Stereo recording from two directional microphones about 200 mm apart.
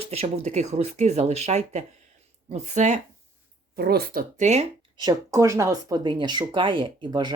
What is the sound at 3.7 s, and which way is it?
Speech, 50° right (ahead or behind).